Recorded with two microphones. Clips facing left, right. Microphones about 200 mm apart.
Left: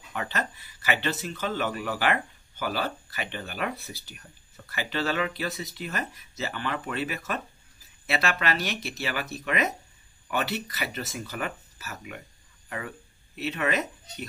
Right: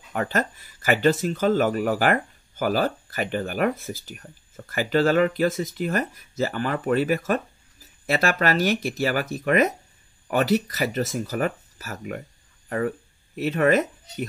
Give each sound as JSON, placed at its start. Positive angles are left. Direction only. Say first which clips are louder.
{"t": 0.1, "sound": "speech", "louder": "right 7 dB", "side_deg": -45}